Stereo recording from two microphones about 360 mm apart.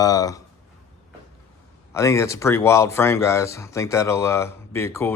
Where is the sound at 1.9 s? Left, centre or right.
Centre.